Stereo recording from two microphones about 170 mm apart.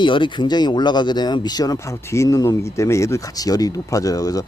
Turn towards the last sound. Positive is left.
turn(degrees=20)  # may be behind; listen again after turning